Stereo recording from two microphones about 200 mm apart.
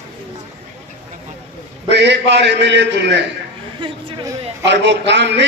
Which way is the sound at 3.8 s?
20° right (ahead or behind).